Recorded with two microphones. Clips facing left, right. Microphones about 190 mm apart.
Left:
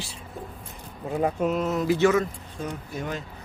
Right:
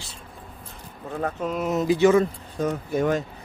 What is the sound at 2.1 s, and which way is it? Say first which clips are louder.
Speech: right 5 dB; 35° right (ahead or behind).